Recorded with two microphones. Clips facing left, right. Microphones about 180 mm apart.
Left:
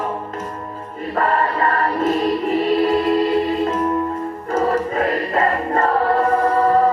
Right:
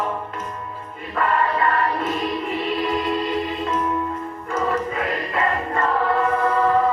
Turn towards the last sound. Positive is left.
turn(degrees=35)  # may be behind; listen again after turning